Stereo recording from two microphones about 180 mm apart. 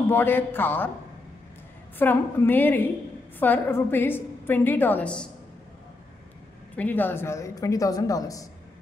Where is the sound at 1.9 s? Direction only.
10° left (ahead or behind).